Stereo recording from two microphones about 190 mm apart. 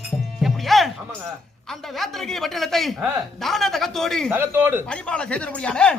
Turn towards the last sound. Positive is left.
turn(degrees=5)  # may be behind; listen again after turning